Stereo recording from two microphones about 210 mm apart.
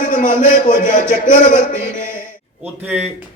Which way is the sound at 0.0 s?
40° left (ahead or behind).